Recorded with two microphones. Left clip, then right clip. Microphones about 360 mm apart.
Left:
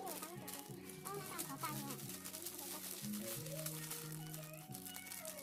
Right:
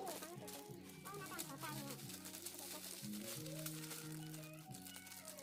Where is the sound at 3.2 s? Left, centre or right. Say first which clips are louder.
Left 1 dB; right.